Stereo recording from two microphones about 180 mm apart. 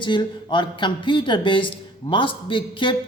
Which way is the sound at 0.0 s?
25° left (ahead or behind).